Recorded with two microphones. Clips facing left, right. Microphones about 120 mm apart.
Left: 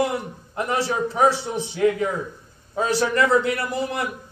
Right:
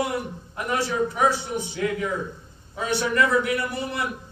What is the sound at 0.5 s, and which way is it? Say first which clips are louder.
Speech: left 1 dB; 30° left (ahead or behind).